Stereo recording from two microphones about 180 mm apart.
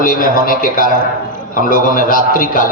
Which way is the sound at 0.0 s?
50° left (ahead or behind).